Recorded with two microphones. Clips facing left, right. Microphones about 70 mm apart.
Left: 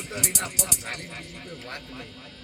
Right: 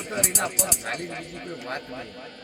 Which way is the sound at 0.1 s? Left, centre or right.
Right.